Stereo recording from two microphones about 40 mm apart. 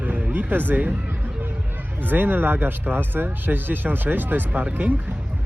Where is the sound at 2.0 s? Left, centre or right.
Right.